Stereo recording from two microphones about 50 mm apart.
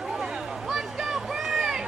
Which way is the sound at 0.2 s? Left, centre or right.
Centre.